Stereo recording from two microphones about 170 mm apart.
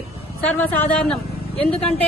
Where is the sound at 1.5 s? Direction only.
35° left (ahead or behind).